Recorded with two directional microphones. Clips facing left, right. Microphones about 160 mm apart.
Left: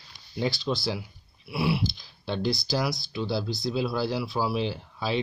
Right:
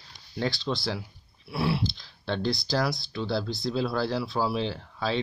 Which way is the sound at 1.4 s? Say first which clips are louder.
Left 1 dB; 10° left (ahead or behind).